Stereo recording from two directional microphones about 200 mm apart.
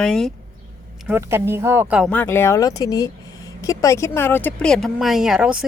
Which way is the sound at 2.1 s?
10° left (ahead or behind).